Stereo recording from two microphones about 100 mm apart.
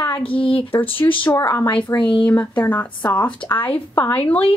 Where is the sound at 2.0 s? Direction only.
60° left (ahead or behind).